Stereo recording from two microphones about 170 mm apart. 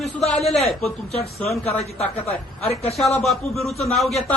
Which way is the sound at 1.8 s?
40° left (ahead or behind).